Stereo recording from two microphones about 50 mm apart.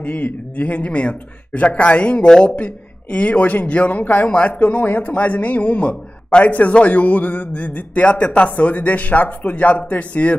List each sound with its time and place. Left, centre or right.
0.0 s a man's voice: left
4.0 s a man's voice: left
4.3 s a man's voice: left
4.6 s a man's voice: left